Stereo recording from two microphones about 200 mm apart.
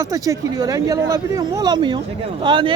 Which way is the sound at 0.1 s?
15° right (ahead or behind).